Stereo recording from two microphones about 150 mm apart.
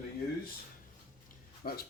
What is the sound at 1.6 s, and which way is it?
Speech, 65° left (ahead or behind).